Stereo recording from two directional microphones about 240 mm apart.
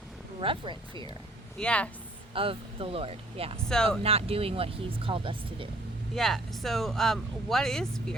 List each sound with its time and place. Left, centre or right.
0.3 s speech: right
1.5 s speech: centre
2.3 s speech: right
6.1 s speech: centre